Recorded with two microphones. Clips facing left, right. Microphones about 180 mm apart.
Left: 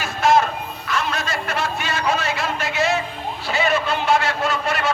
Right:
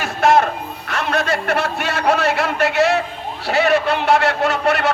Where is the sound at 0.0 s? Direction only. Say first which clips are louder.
Right 3 dB; 65° right (ahead or behind).